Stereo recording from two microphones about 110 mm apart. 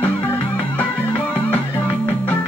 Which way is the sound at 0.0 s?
15° left (ahead or behind).